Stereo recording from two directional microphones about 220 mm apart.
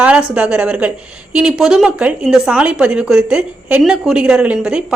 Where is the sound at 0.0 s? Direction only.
5° right (ahead or behind).